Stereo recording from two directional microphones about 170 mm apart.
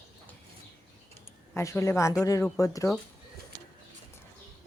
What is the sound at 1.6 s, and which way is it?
Speech, 15° left (ahead or behind).